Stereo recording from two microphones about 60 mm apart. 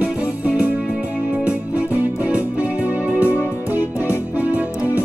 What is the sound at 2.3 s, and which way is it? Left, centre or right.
Music, right.